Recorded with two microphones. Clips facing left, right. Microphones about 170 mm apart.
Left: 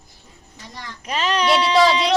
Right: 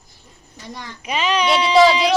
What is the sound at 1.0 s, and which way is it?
Speech, 5° right (ahead or behind).